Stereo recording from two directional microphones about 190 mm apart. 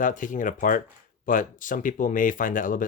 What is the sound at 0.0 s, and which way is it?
Speech, 45° left (ahead or behind).